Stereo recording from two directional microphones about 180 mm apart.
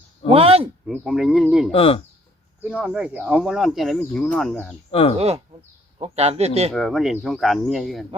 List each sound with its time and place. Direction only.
0.3 s speech: 35° right (ahead or behind)
0.9 s speech: 5° right (ahead or behind)
1.7 s speech: 30° left (ahead or behind)
2.6 s speech: 5° right (ahead or behind)
4.9 s speech: 30° left (ahead or behind)
5.1 s speech: 35° right (ahead or behind)
6.7 s speech: centre (ahead or behind)